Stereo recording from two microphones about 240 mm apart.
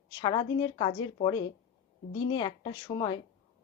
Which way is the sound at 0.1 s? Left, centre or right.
Centre.